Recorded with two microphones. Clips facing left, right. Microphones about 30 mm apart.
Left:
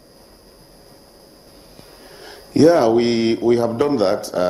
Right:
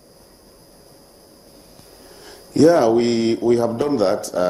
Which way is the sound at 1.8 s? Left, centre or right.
Left.